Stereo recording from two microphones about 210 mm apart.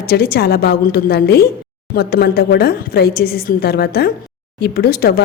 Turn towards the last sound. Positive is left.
turn(degrees=45)  # may be behind; listen again after turning